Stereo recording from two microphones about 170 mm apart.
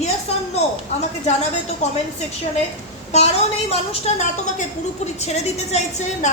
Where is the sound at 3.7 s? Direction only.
35° left (ahead or behind).